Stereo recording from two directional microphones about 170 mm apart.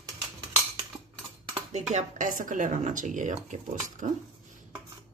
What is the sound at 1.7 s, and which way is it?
Speech, 45° right (ahead or behind).